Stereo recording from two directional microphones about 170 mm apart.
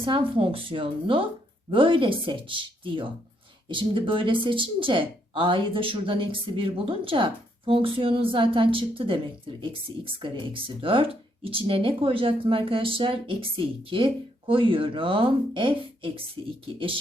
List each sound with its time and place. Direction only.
0.0 s speech: 30° right (ahead or behind)